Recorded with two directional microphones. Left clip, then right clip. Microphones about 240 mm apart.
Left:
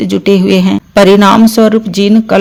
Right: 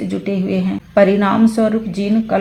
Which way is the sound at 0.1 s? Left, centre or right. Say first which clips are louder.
Left 14 dB; left.